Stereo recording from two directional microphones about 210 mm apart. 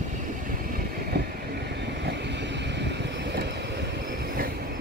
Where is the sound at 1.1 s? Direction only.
50° right (ahead or behind).